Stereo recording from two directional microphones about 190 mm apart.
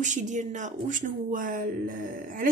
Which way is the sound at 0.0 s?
40° right (ahead or behind).